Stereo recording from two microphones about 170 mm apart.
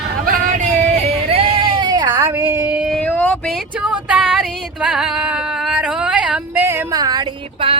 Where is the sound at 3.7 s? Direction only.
5° right (ahead or behind); by 7.7 s 30° right (ahead or behind).